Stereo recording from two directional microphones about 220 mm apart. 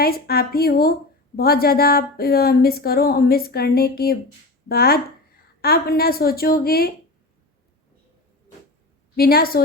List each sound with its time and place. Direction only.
0.0 s speech: 45° left (ahead or behind)
9.1 s speech: 45° left (ahead or behind)